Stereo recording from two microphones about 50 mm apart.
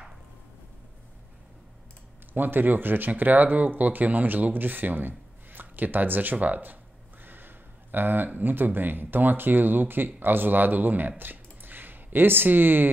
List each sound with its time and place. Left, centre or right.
2.3 s speech: right